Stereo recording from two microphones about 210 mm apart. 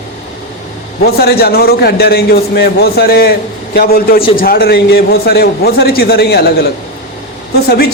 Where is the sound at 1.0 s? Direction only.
50° left (ahead or behind).